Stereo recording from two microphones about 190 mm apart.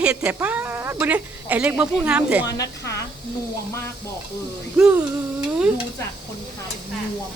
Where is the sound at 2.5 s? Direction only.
15° left (ahead or behind).